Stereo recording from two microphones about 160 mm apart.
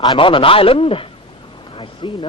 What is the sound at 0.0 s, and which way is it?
A man's voice, 30° left (ahead or behind).